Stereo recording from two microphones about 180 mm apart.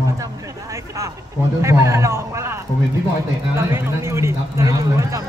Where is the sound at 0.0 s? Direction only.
20° right (ahead or behind).